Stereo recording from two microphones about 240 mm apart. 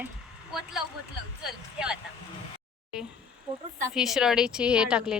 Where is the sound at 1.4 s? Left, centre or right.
Centre.